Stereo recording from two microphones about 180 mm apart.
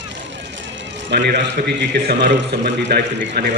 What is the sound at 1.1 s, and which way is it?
A man's voice, 65° right (ahead or behind).